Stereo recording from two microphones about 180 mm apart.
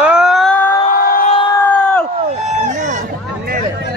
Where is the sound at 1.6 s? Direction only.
5° left (ahead or behind).